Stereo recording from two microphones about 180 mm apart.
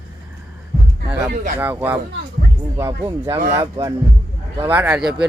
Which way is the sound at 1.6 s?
10° right (ahead or behind).